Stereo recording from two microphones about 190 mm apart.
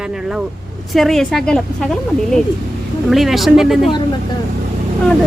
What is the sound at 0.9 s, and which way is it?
Speech, centre (ahead or behind).